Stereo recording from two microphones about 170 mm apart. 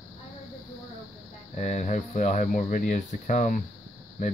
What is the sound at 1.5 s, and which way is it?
Speech, 45° left (ahead or behind).